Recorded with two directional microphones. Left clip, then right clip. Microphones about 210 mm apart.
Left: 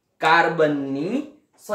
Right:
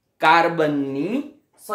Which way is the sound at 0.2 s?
30° right (ahead or behind).